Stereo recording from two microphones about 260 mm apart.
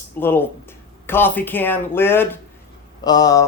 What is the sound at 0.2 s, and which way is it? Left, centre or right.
Speech, centre.